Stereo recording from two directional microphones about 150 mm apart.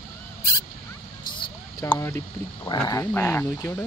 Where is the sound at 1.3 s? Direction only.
30° left (ahead or behind).